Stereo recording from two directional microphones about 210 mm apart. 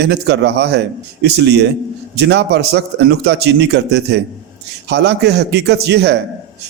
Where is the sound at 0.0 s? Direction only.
55° right (ahead or behind).